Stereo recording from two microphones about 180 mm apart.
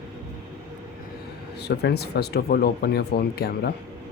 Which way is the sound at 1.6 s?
65° left (ahead or behind).